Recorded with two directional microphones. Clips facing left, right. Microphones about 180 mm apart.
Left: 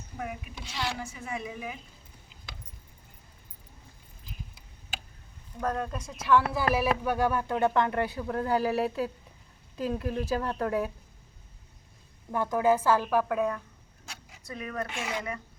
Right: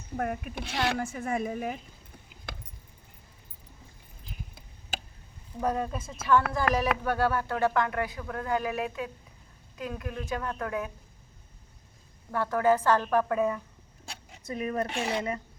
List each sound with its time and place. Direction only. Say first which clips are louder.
0.2 s speech: right 6 dB; 55° right (ahead or behind)
2.5 s keys jangling: right 6 dB; 55° right (ahead or behind)
5.5 s speech: right 2 dB; 5° right (ahead or behind)
7.0 s a woman's voice: even; 15° left (ahead or behind); by 10.9 s 30° left (ahead or behind)
12.3 s a woman's voice: even; 15° left (ahead or behind); by 13.6 s centre (ahead or behind)
14.0 s speech: right 3 dB; 30° right (ahead or behind)